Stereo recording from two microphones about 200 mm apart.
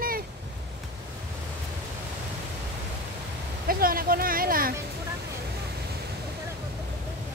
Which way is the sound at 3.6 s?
45° right (ahead or behind).